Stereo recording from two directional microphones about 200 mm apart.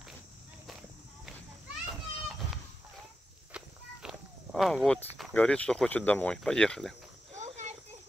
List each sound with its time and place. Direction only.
1.9 s children playing: centre (ahead or behind)
3.5 s walk: 5° right (ahead or behind)
5.1 s speech: 5° left (ahead or behind)
7.3 s a sound: 35° right (ahead or behind)